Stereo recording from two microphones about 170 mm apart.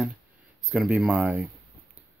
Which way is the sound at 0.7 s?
10° right (ahead or behind).